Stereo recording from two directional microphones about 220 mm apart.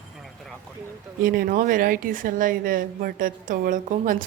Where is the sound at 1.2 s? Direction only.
40° right (ahead or behind).